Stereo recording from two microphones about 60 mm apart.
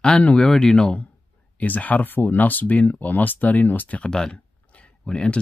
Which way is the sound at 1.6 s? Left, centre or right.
Left.